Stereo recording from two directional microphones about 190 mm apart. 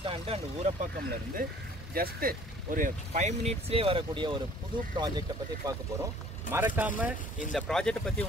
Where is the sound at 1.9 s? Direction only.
50° right (ahead or behind); by 5.7 s 20° right (ahead or behind).